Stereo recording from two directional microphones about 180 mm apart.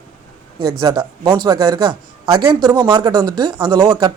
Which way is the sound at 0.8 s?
25° right (ahead or behind).